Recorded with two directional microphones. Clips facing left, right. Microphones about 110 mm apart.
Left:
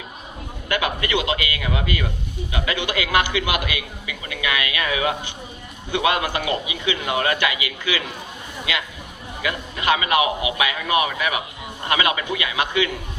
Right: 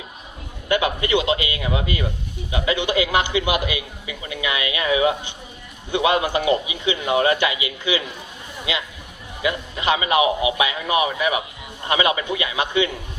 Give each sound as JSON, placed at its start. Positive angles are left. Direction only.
{"t": 0.7, "sound": "a man's voice", "side_deg": -25}